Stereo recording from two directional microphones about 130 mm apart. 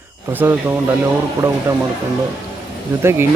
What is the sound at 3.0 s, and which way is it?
Speech, 20° right (ahead or behind).